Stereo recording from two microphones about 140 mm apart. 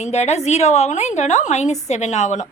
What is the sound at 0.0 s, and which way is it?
A woman's voice, 50° left (ahead or behind).